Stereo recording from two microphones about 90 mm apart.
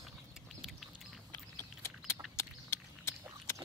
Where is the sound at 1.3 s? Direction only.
30° left (ahead or behind).